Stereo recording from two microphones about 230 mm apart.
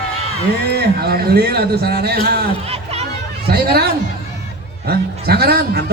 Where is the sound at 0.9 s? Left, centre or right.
Right.